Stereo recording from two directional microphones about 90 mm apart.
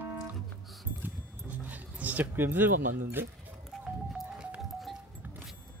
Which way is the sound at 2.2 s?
25° right (ahead or behind).